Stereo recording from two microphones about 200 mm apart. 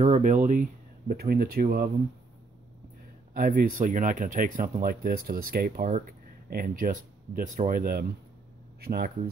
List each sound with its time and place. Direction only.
0.0 s speech: 35° right (ahead or behind)
3.3 s speech: 45° right (ahead or behind)